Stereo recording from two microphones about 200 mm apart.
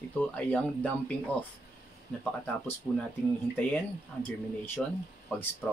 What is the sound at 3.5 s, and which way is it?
Speech, 5° left (ahead or behind).